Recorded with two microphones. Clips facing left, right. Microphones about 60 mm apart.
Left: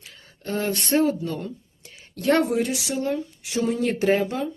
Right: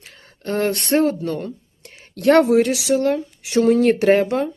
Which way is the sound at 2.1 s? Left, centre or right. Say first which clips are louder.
Right 7 dB; right.